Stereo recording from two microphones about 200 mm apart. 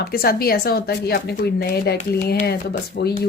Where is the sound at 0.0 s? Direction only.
50° left (ahead or behind).